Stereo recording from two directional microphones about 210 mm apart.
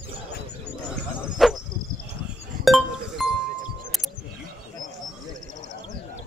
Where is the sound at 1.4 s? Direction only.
Centre (ahead or behind).